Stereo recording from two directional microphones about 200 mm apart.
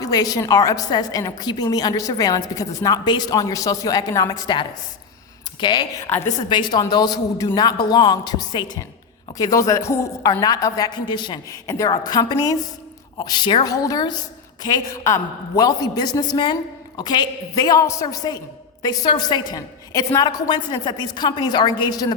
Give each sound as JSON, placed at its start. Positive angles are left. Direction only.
{"t": 0.0, "sound": "a woman's voice", "side_deg": 20}